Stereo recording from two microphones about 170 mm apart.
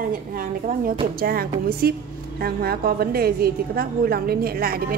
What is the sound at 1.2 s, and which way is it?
A woman's voice, 60° right (ahead or behind).